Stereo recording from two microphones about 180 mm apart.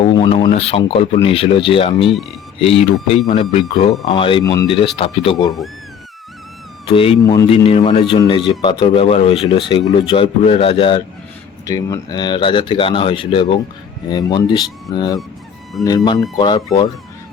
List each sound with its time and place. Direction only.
0.0 s speech: 30° left (ahead or behind)
6.8 s speech: 30° left (ahead or behind)
11.6 s speech: 20° left (ahead or behind)
16.4 s speech: 25° left (ahead or behind)